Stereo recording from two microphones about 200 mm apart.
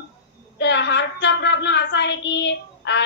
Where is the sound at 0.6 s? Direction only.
60° left (ahead or behind).